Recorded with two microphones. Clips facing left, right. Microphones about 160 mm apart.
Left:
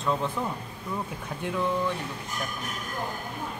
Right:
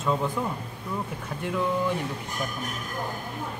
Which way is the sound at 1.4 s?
Centre (ahead or behind).